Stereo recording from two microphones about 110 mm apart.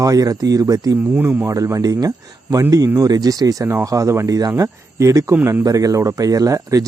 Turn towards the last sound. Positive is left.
turn(degrees=-30)  # may be behind; listen again after turning